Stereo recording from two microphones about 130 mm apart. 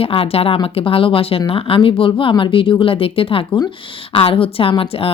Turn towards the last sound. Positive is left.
turn(degrees=45)  # may be behind; listen again after turning